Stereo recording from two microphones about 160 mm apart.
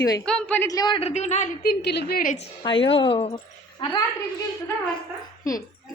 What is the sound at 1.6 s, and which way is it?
Speech, 90° left.